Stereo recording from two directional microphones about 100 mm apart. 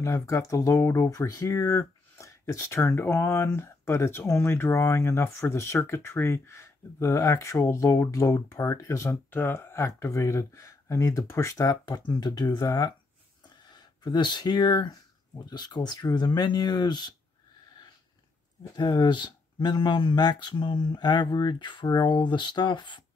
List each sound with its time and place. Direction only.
0.0 s speech: 30° left (ahead or behind); by 17.1 s 45° left (ahead or behind)
18.8 s speech: 45° left (ahead or behind)